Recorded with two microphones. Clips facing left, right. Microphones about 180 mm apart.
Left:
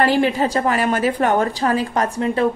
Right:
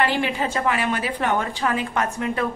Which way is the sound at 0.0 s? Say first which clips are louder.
Left 6 dB; 40° left (ahead or behind).